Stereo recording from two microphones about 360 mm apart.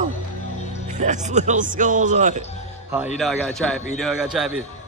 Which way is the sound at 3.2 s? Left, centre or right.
Centre.